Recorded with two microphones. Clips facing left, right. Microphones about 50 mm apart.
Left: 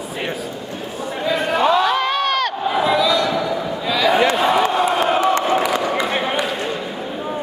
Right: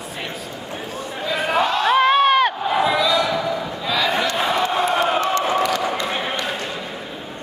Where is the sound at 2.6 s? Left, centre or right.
Centre.